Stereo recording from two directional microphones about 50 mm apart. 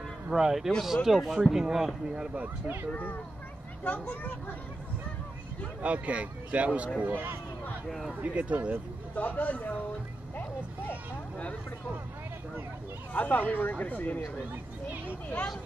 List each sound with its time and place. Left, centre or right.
0.3 s speech: centre
0.7 s speech: centre
2.3 s speech: right
3.8 s speech: left
5.8 s speech: right
9.1 s speech: left
13.1 s speech: left